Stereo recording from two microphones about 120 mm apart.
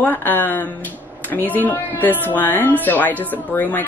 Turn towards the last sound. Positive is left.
turn(degrees=15)  # may be behind; listen again after turning